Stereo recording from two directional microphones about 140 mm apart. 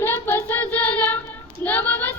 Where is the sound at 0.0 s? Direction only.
15° left (ahead or behind).